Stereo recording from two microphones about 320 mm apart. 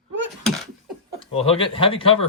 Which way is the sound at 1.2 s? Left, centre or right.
Centre.